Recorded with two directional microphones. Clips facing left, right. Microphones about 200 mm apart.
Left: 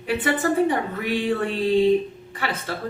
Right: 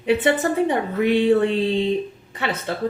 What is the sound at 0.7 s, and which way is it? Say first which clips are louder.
Speech: right 5 dB; 25° right (ahead or behind).